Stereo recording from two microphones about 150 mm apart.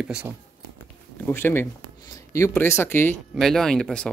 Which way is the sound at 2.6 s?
15° left (ahead or behind).